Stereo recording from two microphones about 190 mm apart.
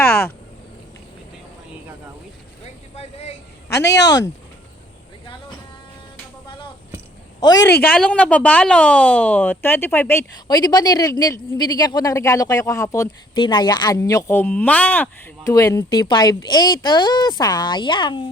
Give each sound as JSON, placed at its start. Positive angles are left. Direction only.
{"t": 0.0, "sound": "a sound", "side_deg": 10}
{"t": 7.3, "sound": "speech", "side_deg": 20}
{"t": 7.7, "sound": "a woman's voice", "side_deg": 10}